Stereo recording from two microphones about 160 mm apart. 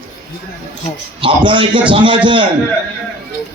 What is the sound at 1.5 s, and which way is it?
Speech, 30° right (ahead or behind).